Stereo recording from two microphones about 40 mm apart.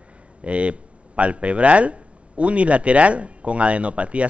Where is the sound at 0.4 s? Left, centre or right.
Right.